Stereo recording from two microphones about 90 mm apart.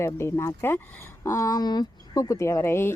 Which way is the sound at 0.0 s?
30° left (ahead or behind).